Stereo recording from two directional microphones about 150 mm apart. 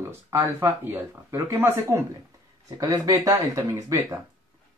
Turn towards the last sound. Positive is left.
turn(degrees=-20)  # may be behind; listen again after turning